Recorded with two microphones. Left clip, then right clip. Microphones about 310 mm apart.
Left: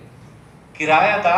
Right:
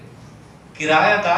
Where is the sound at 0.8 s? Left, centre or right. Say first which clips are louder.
Even; centre.